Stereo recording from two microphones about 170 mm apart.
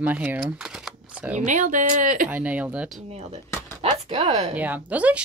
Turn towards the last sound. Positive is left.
turn(degrees=-10)  # may be behind; listen again after turning